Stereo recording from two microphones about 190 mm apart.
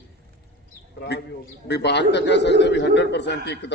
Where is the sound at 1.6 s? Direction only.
65° left (ahead or behind).